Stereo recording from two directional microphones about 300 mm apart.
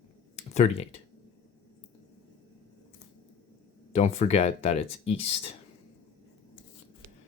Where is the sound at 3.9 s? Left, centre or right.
Left.